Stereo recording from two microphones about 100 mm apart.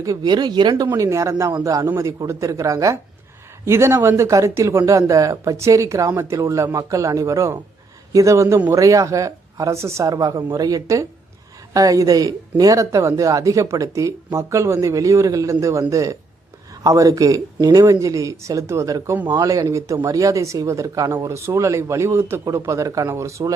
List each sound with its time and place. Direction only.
0.0 s speech: 40° right (ahead or behind)